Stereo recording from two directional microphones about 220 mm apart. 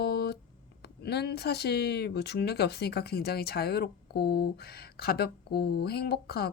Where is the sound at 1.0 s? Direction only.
45° left (ahead or behind).